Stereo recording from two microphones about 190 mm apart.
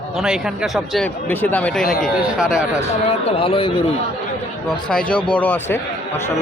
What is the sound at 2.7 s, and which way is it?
Speech, 35° left (ahead or behind).